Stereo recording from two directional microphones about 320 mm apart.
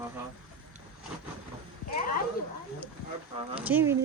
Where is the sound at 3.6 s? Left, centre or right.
Centre.